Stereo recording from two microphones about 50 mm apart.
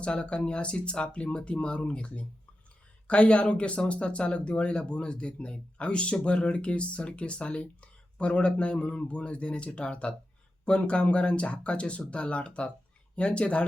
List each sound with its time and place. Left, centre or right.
0.0 s speech: centre